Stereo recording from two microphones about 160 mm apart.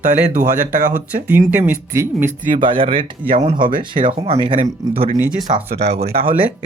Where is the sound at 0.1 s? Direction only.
55° right (ahead or behind).